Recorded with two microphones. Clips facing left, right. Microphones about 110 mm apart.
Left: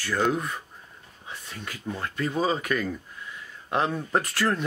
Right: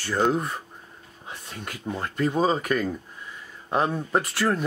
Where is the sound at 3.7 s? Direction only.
10° right (ahead or behind).